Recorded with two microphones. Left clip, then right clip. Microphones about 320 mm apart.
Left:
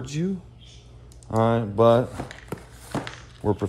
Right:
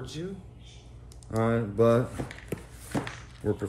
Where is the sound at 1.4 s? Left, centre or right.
Left.